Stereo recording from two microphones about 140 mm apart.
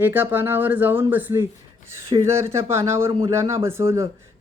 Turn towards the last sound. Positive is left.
turn(degrees=-20)  # may be behind; listen again after turning